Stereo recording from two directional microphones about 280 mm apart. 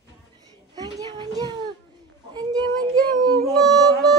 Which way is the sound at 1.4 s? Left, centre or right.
Centre.